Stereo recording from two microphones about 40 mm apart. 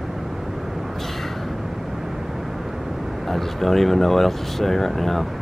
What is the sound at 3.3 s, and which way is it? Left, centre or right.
Speech, centre.